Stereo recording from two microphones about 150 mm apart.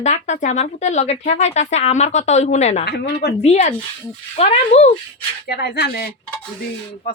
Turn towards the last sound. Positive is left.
turn(degrees=90)